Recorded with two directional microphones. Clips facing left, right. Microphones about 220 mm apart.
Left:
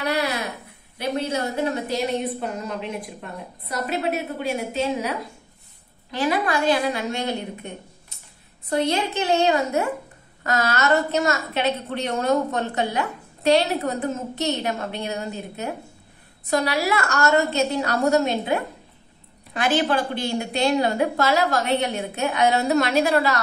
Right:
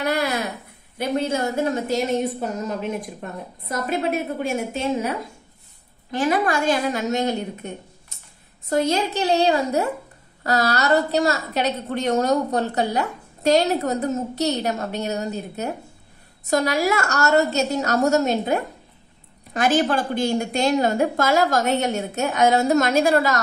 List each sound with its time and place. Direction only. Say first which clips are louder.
0.0 s a woman's voice: right 2 dB; 50° right (ahead or behind)
6.1 s a woman's voice: right 2 dB; 45° right (ahead or behind)